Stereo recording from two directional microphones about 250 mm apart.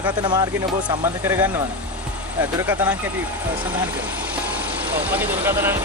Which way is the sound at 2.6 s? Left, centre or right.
Centre.